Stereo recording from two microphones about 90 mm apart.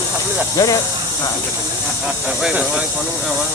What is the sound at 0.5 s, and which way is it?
Speech, 40° left (ahead or behind).